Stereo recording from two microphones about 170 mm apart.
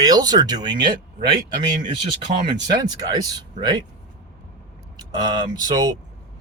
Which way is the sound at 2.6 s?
25° right (ahead or behind).